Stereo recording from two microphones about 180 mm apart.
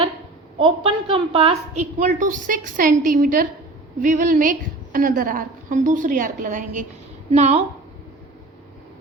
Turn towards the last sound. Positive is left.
turn(degrees=-35)  # may be behind; listen again after turning